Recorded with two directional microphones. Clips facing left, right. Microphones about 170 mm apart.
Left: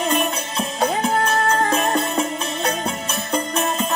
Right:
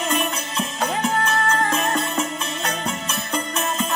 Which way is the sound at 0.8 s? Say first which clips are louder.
Left 3 dB; 35° left (ahead or behind).